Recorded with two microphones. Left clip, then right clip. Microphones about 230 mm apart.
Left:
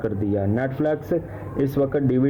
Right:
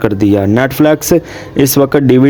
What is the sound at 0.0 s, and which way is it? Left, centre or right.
Speech, right.